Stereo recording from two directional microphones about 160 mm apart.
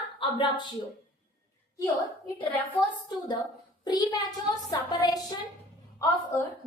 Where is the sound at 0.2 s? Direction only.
30° left (ahead or behind).